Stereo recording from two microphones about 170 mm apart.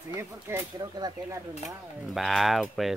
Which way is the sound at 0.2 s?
15° right (ahead or behind).